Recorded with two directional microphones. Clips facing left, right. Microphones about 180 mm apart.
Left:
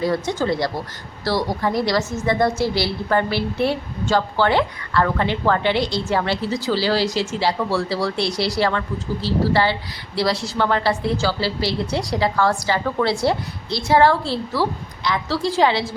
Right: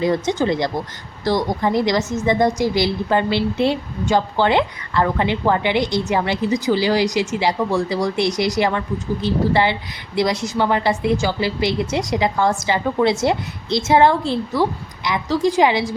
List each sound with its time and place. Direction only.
0.0 s a woman's voice: 20° right (ahead or behind)